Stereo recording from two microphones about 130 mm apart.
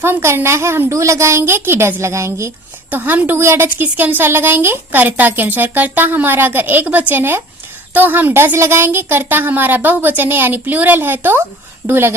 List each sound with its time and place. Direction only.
0.0 s a woman's voice: 20° right (ahead or behind)